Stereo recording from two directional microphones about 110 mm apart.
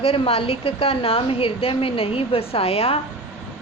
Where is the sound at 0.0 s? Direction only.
60° left (ahead or behind).